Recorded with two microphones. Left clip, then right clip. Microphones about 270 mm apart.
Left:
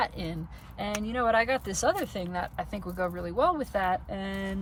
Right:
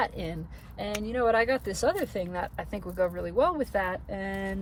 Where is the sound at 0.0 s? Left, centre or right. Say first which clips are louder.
Even; centre.